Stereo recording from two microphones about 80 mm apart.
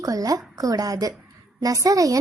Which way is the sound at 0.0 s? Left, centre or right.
Right.